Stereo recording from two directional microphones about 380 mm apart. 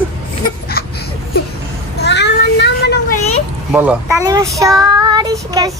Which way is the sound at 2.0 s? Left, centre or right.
Left.